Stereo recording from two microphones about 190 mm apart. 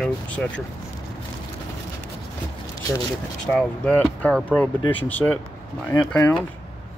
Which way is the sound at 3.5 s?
5° left (ahead or behind).